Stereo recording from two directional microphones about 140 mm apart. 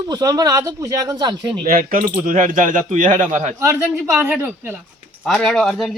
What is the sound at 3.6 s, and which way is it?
Speech, 15° right (ahead or behind).